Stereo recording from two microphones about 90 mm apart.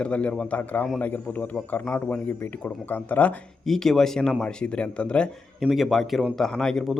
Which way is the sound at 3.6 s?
5° left (ahead or behind).